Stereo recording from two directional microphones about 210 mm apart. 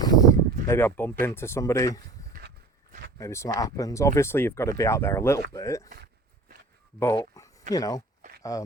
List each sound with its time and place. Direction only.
0.0 s a sound: 15° left (ahead or behind)
1.2 s speech: 10° left (ahead or behind)
3.2 s speech: 15° left (ahead or behind)
7.0 s speech: 15° left (ahead or behind)